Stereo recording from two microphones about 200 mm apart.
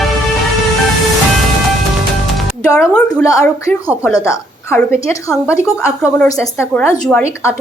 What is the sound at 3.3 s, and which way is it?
A woman's voice, 15° left (ahead or behind).